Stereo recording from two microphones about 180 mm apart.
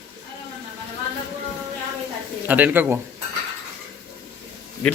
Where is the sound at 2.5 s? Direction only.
10° right (ahead or behind).